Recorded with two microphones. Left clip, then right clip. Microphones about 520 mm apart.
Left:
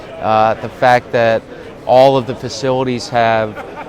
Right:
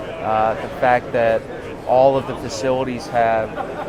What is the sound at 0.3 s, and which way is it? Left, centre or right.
Speech, left.